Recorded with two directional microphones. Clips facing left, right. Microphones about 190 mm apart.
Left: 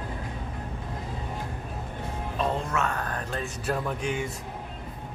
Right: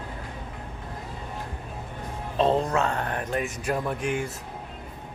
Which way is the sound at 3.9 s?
5° right (ahead or behind).